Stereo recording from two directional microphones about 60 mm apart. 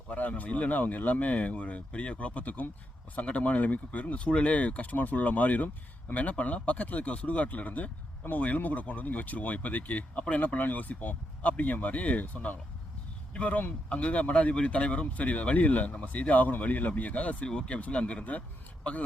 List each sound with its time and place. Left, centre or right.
0.1 s speech: left